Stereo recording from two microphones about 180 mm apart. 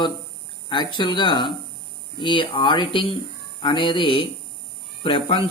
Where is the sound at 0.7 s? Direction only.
25° left (ahead or behind).